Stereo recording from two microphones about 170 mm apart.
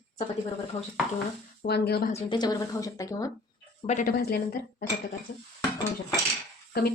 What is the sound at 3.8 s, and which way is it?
Speech, 45° left (ahead or behind).